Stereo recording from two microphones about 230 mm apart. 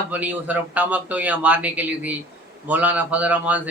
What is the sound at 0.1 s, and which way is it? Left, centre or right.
A man's voice, centre.